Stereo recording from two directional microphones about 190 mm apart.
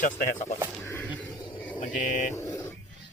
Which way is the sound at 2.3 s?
15° left (ahead or behind).